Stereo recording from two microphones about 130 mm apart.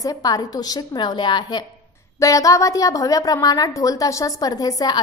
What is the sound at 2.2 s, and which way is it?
A woman's voice, 25° left (ahead or behind).